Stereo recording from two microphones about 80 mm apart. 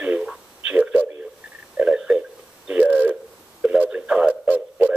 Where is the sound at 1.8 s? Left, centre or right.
Centre.